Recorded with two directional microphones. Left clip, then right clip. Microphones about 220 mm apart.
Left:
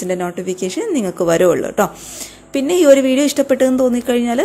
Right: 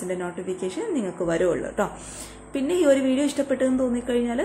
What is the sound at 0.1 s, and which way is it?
A woman's voice, 40° left (ahead or behind).